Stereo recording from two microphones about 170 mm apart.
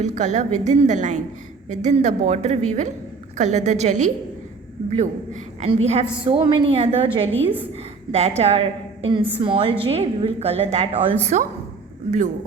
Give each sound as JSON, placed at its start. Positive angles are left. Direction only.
{"t": 0.0, "sound": "a woman's voice", "side_deg": -45}